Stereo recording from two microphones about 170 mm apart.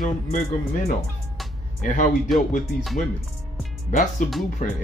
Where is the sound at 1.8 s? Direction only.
50° left (ahead or behind).